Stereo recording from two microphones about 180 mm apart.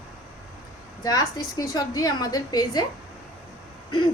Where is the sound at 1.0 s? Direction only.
20° left (ahead or behind).